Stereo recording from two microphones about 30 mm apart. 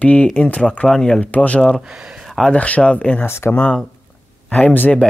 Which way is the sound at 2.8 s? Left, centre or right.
Left.